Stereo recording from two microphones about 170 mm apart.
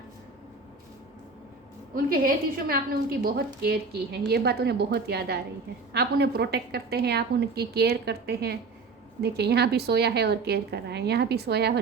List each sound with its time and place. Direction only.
2.0 s a woman's voice: 60° right (ahead or behind)